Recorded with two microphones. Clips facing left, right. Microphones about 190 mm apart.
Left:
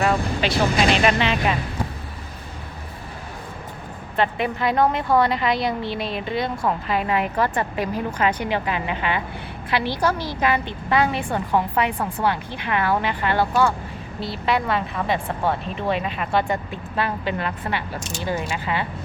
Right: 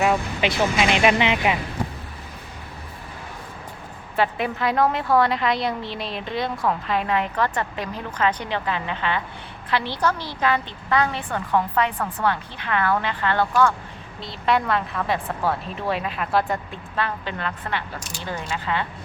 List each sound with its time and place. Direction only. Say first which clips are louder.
0.4 s speech: left 1 dB; 15° right (ahead or behind)
4.2 s a woman's voice: left 1 dB; centre (ahead or behind)
16.9 s a woman's voice: left 3 dB; 10° left (ahead or behind)